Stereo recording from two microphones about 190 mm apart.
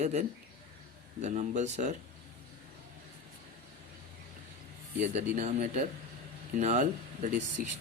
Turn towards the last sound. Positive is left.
turn(degrees=-40)  # may be behind; listen again after turning